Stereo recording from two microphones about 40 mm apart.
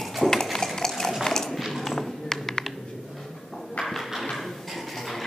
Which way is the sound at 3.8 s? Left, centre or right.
Centre.